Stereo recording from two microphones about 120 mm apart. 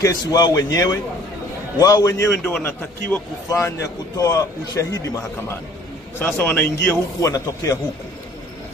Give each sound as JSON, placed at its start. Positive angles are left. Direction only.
{"t": 0.0, "sound": "a man's voice", "side_deg": 30}
{"t": 3.4, "sound": "a man's voice", "side_deg": 25}